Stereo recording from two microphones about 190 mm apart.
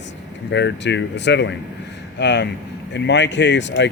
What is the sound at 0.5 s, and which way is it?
Speech, 65° left (ahead or behind).